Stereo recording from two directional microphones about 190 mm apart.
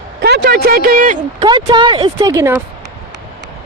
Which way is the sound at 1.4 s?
25° right (ahead or behind).